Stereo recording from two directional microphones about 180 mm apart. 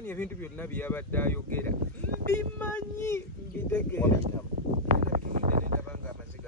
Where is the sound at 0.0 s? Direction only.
10° left (ahead or behind).